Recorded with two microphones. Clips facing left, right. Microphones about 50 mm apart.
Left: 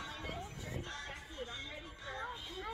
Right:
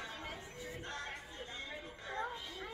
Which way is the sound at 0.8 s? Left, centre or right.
Right.